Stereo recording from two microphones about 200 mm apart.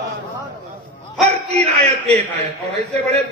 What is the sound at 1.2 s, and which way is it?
Speech, 30° right (ahead or behind).